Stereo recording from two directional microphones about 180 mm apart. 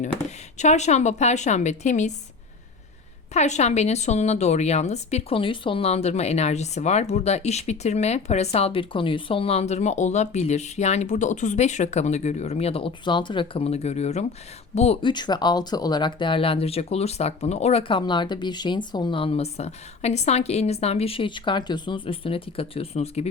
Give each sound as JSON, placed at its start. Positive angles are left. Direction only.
{"t": 0.6, "sound": "a woman's voice", "side_deg": 40}
{"t": 3.3, "sound": "a woman's voice", "side_deg": 40}